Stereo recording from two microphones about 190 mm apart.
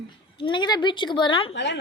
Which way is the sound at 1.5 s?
70° left (ahead or behind).